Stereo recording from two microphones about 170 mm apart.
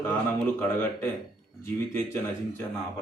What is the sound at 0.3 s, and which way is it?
Speech, 10° left (ahead or behind).